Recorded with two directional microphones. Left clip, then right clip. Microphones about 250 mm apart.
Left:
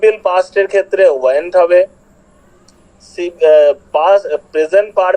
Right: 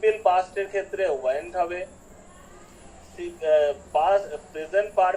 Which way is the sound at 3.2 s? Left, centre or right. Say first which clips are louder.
Left 13 dB; left.